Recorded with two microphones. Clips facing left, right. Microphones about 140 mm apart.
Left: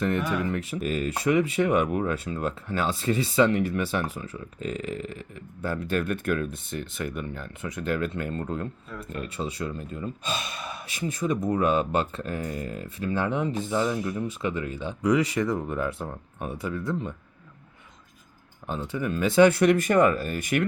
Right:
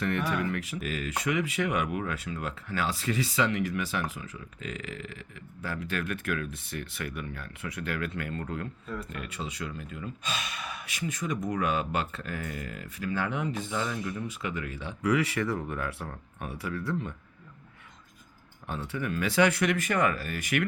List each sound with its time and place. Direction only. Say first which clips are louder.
0.4 s speech: left 4 dB; 30° left (ahead or behind)
18.7 s speech: left 4 dB; 20° left (ahead or behind)